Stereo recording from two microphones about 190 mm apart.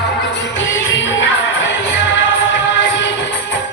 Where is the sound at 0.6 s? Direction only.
80° left.